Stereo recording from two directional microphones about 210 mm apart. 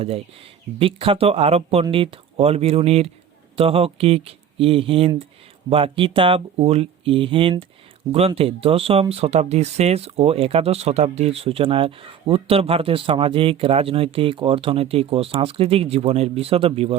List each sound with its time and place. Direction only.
0.8 s speech: 25° right (ahead or behind)